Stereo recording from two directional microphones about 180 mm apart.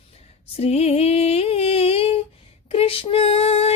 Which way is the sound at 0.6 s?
35° left (ahead or behind).